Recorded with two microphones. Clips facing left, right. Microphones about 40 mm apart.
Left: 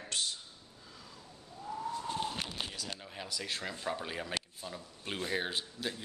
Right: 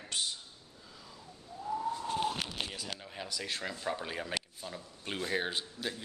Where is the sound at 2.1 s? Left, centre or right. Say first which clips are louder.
Right 3 dB; centre.